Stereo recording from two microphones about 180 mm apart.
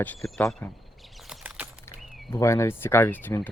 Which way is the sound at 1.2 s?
5° right (ahead or behind).